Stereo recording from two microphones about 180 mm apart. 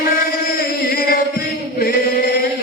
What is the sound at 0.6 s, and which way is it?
Chant, 55° left (ahead or behind).